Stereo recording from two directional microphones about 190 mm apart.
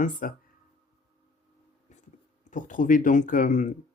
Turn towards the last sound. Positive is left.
turn(degrees=40)  # may be behind; listen again after turning